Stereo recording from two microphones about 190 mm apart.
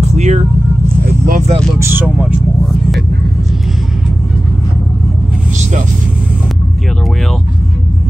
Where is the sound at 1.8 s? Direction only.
10° right (ahead or behind).